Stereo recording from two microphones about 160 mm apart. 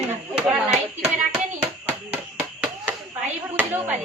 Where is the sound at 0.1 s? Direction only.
5° right (ahead or behind).